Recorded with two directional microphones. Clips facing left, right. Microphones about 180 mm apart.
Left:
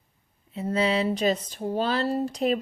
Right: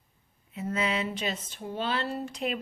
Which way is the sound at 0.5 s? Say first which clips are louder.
Left 6 dB; 30° left (ahead or behind).